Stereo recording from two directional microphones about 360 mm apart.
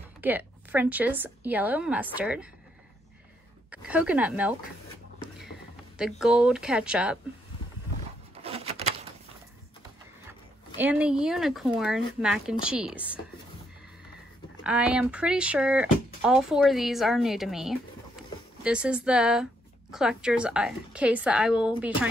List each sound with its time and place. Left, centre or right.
0.2 s speech: centre
3.7 s speech: centre
5.9 s speech: centre
8.4 s a sound: centre
10.8 s speech: centre
14.6 s speech: centre